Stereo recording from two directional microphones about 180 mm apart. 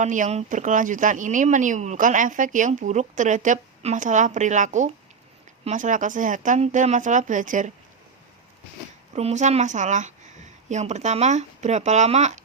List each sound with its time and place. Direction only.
0.0 s a woman's voice: 45° right (ahead or behind)
9.1 s speech: 40° right (ahead or behind)